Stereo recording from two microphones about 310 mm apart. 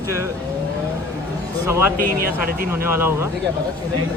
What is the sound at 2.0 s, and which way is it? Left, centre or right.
Speech, right.